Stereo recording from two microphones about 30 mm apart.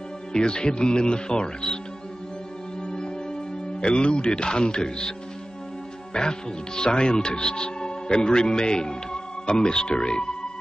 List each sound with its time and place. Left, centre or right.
0.3 s speech: left
3.8 s speech: left
6.1 s a man's voice: left